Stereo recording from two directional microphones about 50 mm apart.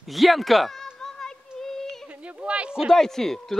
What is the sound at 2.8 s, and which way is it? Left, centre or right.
Speech, centre.